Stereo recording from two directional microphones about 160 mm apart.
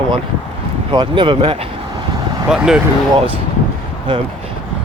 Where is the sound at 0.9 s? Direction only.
30° right (ahead or behind).